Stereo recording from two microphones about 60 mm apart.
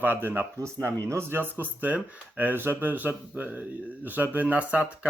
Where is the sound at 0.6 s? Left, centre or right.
Right.